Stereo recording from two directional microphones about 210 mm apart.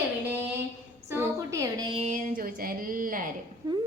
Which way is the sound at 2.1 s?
40° right (ahead or behind).